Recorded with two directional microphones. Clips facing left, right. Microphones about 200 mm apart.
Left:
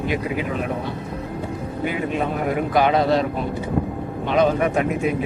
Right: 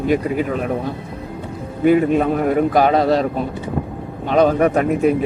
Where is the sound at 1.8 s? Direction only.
45° right (ahead or behind).